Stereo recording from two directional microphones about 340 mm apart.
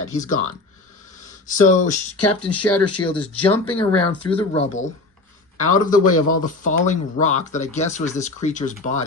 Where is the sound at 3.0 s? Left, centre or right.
Centre.